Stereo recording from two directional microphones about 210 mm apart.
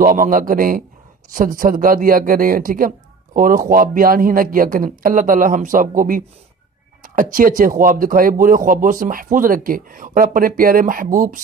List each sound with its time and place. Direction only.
0.0 s speech: 40° right (ahead or behind)